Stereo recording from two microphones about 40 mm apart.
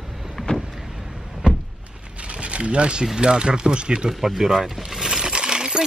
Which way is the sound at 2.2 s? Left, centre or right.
Right.